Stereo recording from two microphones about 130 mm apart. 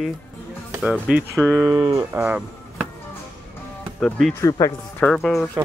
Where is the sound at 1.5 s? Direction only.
25° right (ahead or behind).